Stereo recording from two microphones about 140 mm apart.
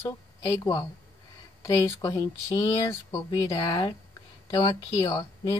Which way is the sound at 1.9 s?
25° left (ahead or behind).